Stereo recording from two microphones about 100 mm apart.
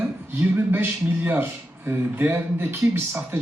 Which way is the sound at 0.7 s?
20° right (ahead or behind).